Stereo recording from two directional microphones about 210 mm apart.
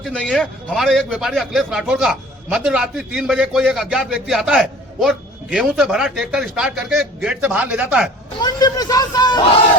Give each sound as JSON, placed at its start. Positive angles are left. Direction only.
{"t": 0.0, "sound": "a man's voice", "side_deg": 0}
{"t": 8.4, "sound": "speech", "side_deg": 20}